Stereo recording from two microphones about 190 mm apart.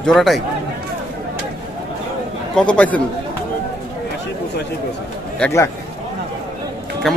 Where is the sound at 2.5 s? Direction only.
5° left (ahead or behind).